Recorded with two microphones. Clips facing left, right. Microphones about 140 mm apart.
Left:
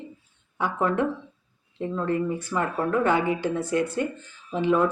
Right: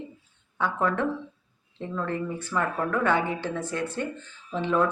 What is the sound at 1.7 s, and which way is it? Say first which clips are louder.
Speech: left 4 dB; 10° left (ahead or behind).